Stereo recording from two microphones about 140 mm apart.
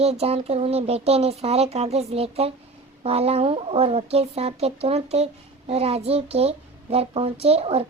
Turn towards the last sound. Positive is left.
turn(degrees=-45)  # may be behind; listen again after turning